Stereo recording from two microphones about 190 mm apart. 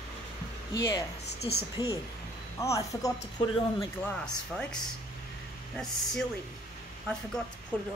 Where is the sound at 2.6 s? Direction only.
15° left (ahead or behind).